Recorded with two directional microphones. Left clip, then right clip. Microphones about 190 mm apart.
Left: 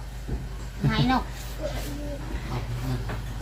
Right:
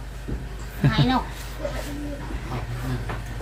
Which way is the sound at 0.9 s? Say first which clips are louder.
Right 1 dB; 15° left (ahead or behind).